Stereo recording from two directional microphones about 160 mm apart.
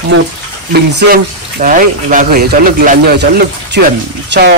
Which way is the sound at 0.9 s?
60° right (ahead or behind).